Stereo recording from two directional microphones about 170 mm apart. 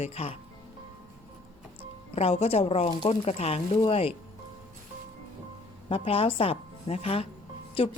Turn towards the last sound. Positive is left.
turn(degrees=30)  # may be behind; listen again after turning